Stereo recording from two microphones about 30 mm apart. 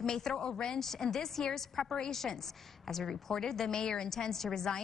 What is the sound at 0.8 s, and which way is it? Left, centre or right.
A woman's voice, centre.